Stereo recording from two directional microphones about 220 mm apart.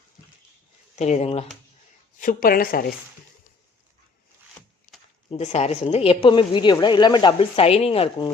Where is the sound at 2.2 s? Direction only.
40° left (ahead or behind).